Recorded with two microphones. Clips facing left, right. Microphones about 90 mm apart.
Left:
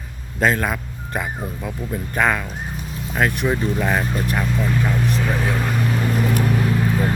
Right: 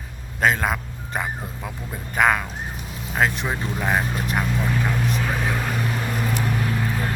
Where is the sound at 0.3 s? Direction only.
20° right (ahead or behind).